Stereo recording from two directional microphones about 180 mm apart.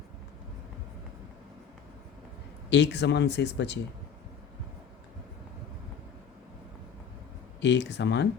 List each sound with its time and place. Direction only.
2.6 s speech: 75° left (ahead or behind)
7.6 s speech: 75° left (ahead or behind)